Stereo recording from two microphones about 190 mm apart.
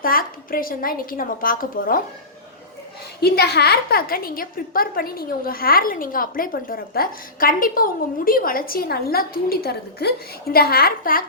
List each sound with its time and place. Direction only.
0.0 s a woman's voice: 50° left (ahead or behind)
3.2 s a woman's voice: 55° left (ahead or behind)